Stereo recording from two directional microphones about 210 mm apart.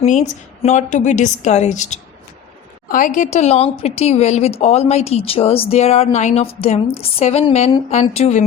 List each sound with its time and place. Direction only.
0.0 s a woman's voice: 30° left (ahead or behind)